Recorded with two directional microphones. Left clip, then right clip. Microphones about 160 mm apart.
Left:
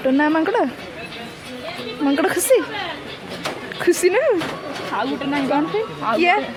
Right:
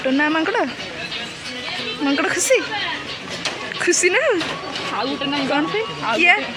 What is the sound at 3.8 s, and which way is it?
Speech, 30° left (ahead or behind).